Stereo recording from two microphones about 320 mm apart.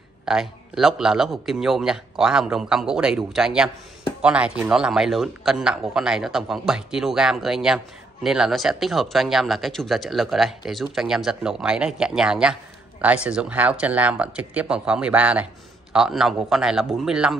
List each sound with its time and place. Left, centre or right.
0.2 s a man's voice: centre